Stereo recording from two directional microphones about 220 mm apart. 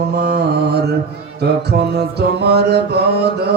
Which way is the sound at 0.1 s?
45° right (ahead or behind).